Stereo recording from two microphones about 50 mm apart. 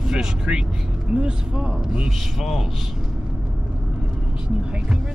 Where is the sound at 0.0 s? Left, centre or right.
Centre.